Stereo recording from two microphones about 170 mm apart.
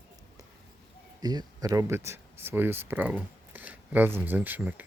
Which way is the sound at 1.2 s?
25° right (ahead or behind).